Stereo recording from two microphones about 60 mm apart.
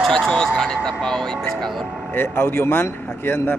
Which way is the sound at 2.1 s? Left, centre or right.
Left.